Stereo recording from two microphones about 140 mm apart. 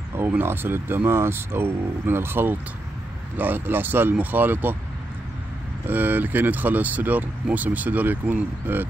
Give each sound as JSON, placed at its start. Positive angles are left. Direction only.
{"t": 0.1, "sound": "speech", "side_deg": -15}
{"t": 5.9, "sound": "speech", "side_deg": -10}